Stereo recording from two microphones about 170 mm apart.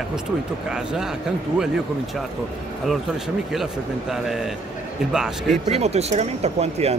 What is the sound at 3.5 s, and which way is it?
Speech, centre (ahead or behind).